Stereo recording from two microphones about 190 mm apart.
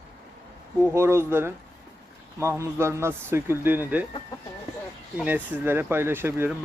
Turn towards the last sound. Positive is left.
turn(degrees=-10)  # may be behind; listen again after turning